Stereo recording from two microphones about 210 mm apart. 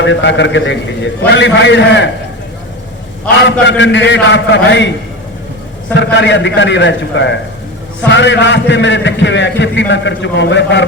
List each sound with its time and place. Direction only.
0.0 s a man's voice: 60° left (ahead or behind)
3.3 s a man's voice: 55° left (ahead or behind)
5.9 s a man's voice: 60° left (ahead or behind)